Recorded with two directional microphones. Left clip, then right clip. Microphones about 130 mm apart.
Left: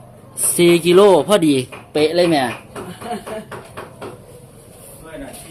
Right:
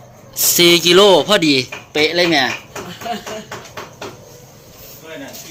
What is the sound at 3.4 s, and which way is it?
Music, 40° right (ahead or behind).